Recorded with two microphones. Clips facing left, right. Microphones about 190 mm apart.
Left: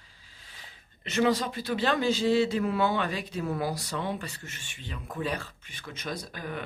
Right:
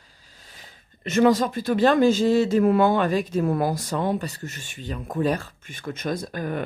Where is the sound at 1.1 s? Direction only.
45° right (ahead or behind).